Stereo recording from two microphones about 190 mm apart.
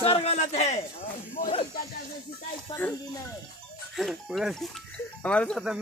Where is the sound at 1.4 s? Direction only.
45° left (ahead or behind).